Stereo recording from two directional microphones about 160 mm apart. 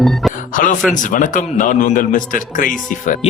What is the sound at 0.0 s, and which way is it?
Speech, centre (ahead or behind).